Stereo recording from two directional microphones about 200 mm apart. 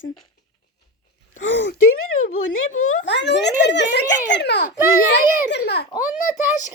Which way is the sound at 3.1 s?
60° left (ahead or behind).